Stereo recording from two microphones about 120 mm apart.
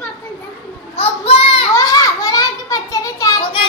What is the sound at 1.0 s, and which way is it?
Child singing, 50° left (ahead or behind).